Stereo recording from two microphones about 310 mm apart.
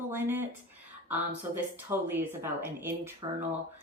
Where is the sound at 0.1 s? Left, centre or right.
Centre.